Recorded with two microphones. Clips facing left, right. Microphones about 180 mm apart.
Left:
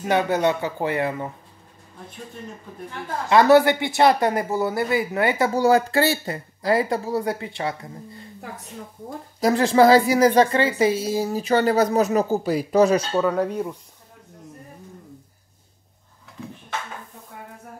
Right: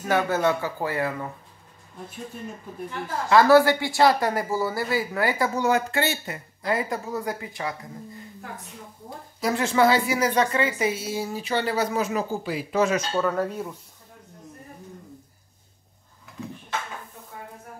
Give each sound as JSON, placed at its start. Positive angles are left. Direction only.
{"t": 0.0, "sound": "speech", "side_deg": 20}
{"t": 3.3, "sound": "speech", "side_deg": 20}
{"t": 9.4, "sound": "speech", "side_deg": 35}
{"t": 13.1, "sound": "speech", "side_deg": 10}